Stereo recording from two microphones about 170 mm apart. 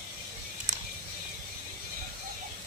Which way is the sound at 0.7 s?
50° right (ahead or behind).